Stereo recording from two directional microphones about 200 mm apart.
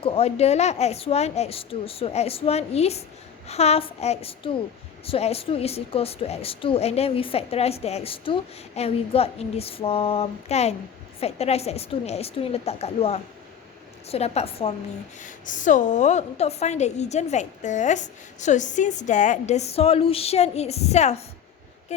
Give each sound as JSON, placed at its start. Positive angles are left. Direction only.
{"t": 0.0, "sound": "a woman's voice", "side_deg": 30}